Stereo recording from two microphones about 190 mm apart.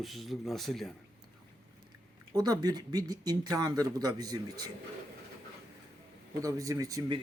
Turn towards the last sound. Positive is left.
turn(degrees=-20)  # may be behind; listen again after turning